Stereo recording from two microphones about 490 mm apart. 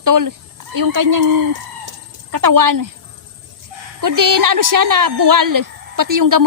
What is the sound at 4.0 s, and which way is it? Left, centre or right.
Speech, right.